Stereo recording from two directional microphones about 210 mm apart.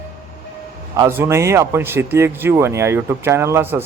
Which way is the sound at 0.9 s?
10° right (ahead or behind).